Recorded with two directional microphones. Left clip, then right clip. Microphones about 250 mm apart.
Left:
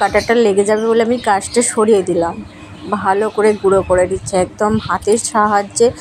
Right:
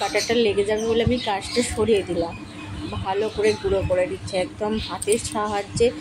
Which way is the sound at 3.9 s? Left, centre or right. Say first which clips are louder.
Left 9 dB; centre.